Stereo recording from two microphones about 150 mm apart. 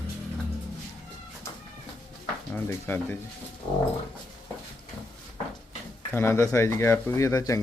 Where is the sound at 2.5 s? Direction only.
15° left (ahead or behind).